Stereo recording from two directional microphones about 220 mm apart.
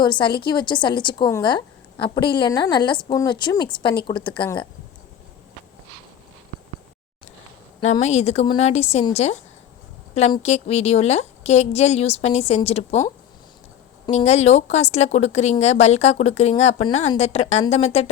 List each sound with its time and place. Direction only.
0.0 s a woman's voice: 20° left (ahead or behind)
7.8 s a woman's voice: 30° left (ahead or behind)
14.1 s a woman's voice: 30° left (ahead or behind)